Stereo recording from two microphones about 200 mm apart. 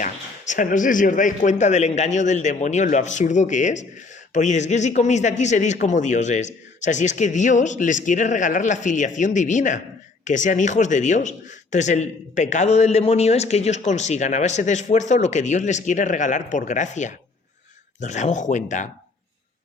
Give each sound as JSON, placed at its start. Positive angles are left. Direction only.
{"t": 0.0, "sound": "a man's voice", "side_deg": 40}